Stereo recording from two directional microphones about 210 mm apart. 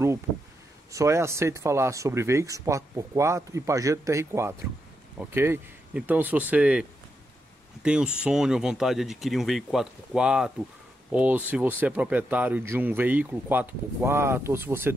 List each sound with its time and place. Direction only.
0.9 s speech: 15° right (ahead or behind)